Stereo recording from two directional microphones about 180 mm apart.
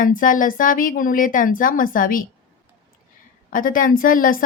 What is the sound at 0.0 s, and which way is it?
A woman's voice, 50° left (ahead or behind).